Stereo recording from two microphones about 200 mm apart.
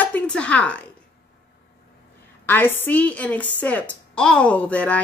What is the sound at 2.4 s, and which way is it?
Speech, 10° left (ahead or behind).